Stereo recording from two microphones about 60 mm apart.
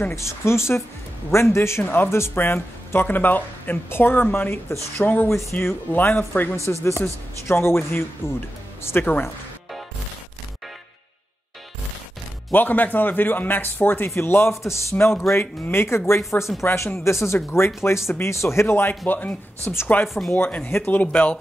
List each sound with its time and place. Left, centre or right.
0.1 s a man's voice: left
6.5 s a man's voice: left
8.8 s speech: left
12.5 s a man's voice: left
16.3 s speech: left
16.6 s a man's voice: left
19.6 s a man's voice: left
20.2 s speech: left